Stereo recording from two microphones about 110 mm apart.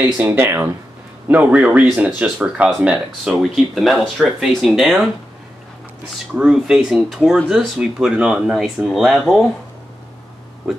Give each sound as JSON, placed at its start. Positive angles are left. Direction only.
{"t": 0.0, "sound": "speech", "side_deg": -20}
{"t": 1.3, "sound": "speech", "side_deg": -10}
{"t": 6.3, "sound": "speech", "side_deg": -5}